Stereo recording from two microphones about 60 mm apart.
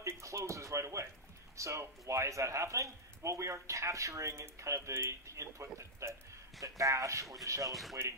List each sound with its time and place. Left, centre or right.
0.0 s speech: right
6.6 s speech: right